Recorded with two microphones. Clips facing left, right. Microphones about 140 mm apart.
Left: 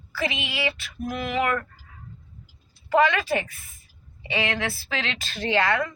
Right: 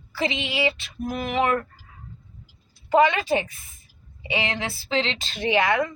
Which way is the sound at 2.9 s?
20° right (ahead or behind).